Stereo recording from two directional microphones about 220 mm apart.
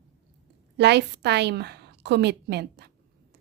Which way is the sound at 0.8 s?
50° right (ahead or behind).